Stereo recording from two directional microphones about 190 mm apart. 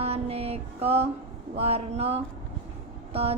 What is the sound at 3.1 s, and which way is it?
Vehicle, 30° right (ahead or behind).